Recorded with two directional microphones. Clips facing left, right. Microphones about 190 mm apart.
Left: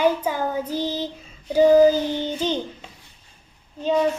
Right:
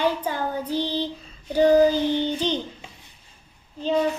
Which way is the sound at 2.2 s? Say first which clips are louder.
Even; 45° left (ahead or behind).